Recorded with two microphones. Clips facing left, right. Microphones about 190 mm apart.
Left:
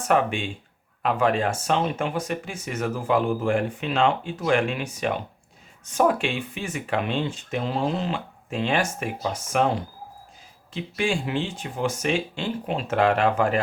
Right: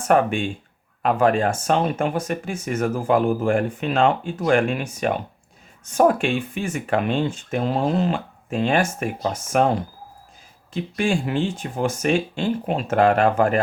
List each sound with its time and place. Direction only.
0.1 s speech: 45° right (ahead or behind)
10.8 s speech: 45° right (ahead or behind)